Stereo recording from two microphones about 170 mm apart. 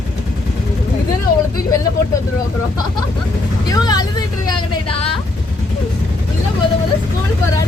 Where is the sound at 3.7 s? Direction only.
25° left (ahead or behind).